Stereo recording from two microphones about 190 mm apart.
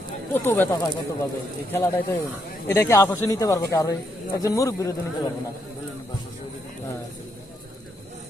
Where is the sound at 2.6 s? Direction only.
15° left (ahead or behind).